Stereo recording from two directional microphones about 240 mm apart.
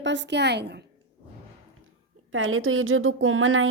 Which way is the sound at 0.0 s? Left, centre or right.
Right.